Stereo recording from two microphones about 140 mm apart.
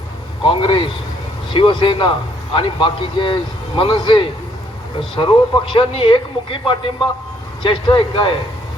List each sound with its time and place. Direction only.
0.4 s a man's voice: 40° left (ahead or behind)